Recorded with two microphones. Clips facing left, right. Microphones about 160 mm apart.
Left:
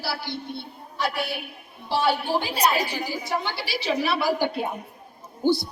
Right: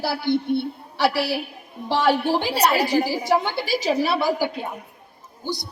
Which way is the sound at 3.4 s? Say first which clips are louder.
Right 6 dB; 50° right (ahead or behind).